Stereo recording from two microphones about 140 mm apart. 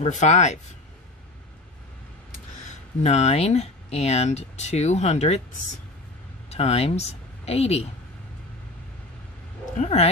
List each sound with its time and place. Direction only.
0.0 s speech: 55° left (ahead or behind)
3.0 s speech: 50° left (ahead or behind)
6.5 s speech: 45° left (ahead or behind)
9.8 s speech: 50° left (ahead or behind)